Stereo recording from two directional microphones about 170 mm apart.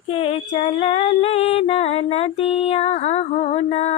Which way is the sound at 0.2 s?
35° left (ahead or behind).